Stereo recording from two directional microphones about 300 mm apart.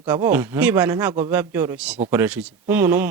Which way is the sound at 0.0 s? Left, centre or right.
Centre.